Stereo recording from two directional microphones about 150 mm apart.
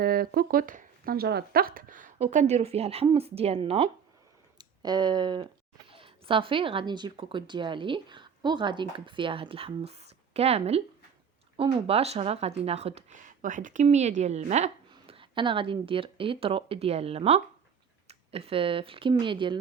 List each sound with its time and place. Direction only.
0.0 s speech: 90° right; by 3.8 s 40° right (ahead or behind)
4.5 s speech: 30° right (ahead or behind); by 13.8 s 60° right (ahead or behind)
13.8 s speech: 50° right (ahead or behind)
14.8 s speech: 35° right (ahead or behind)